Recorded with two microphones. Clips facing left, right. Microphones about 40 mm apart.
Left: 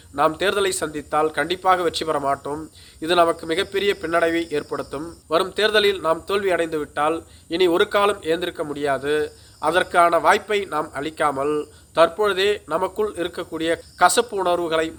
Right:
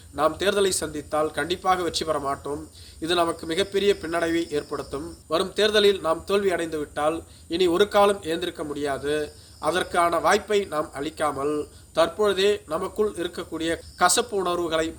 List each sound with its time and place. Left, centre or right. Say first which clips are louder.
0.2 s a man's voice: left 2 dB; left